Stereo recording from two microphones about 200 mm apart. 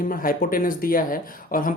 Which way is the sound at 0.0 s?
45° left (ahead or behind).